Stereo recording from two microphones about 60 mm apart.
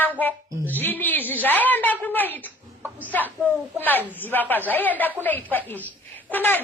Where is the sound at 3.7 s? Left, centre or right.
Left.